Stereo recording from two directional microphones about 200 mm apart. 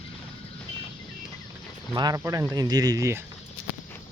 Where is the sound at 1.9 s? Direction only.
20° right (ahead or behind).